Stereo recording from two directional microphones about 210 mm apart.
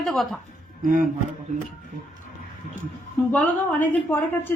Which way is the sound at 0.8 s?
40° right (ahead or behind).